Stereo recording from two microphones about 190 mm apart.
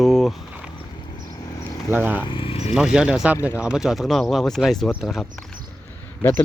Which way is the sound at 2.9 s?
5° right (ahead or behind).